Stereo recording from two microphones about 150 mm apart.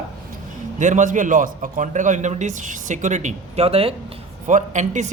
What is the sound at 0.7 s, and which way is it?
A man's voice, 55° right (ahead or behind).